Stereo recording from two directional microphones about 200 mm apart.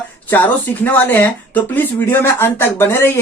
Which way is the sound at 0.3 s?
10° left (ahead or behind).